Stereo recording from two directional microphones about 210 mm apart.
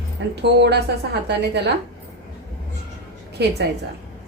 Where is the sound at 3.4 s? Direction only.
55° right (ahead or behind).